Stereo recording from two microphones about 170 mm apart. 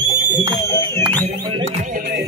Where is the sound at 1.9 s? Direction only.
70° right (ahead or behind).